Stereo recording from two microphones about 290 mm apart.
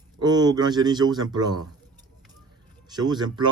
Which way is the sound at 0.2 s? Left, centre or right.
Centre.